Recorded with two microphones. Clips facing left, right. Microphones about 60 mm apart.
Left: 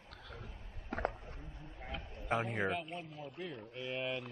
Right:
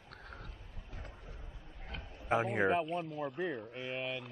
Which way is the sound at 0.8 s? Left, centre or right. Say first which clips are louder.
Left 15 dB; left.